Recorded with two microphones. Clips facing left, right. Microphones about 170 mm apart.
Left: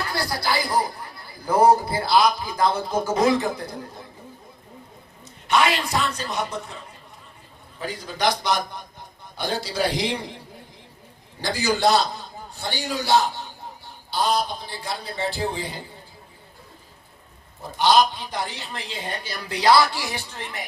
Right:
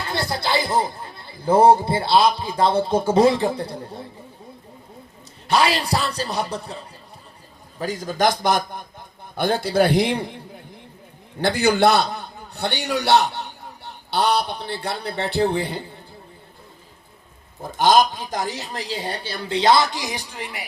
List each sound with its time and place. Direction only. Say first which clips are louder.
0.0 s speech: right 1 dB; 25° right (ahead or behind)
5.5 s speech: right 2 dB; 35° right (ahead or behind)
7.8 s a man's voice: right 5 dB; 45° right (ahead or behind)
11.3 s a man's voice: right 6 dB; 60° right (ahead or behind)
17.6 s speech: right 2 dB; 45° right (ahead or behind); by 20.7 s 10° right (ahead or behind)